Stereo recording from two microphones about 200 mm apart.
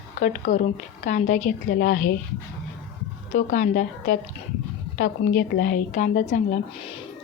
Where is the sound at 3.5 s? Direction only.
40° left (ahead or behind).